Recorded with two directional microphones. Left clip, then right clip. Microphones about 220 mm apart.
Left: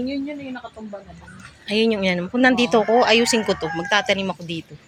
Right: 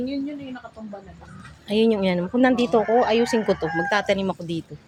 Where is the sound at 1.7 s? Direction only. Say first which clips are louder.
Left 1 dB; 10° right (ahead or behind).